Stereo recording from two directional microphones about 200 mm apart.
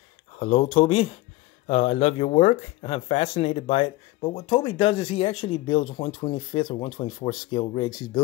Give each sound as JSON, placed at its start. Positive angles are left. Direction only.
{"t": 0.4, "sound": "speech", "side_deg": 30}